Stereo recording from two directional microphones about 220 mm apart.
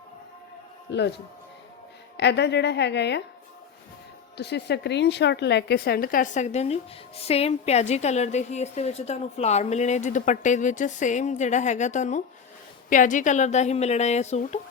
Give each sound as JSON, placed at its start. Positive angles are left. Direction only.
{"t": 0.9, "sound": "a man's voice", "side_deg": 50}
{"t": 2.1, "sound": "a woman's voice", "side_deg": 50}
{"t": 4.4, "sound": "a woman's voice", "side_deg": 50}